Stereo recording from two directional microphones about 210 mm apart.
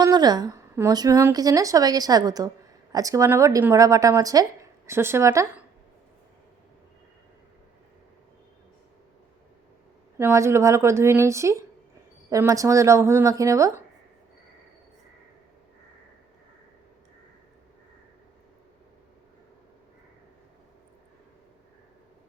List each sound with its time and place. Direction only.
0.0 s a woman's voice: 20° right (ahead or behind)
10.2 s a woman's voice: 10° right (ahead or behind)